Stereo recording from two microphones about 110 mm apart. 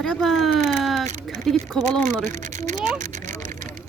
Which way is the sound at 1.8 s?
90° right.